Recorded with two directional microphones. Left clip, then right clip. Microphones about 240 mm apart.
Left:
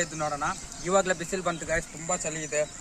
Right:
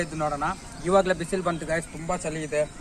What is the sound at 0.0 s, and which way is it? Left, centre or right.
A man's voice, centre.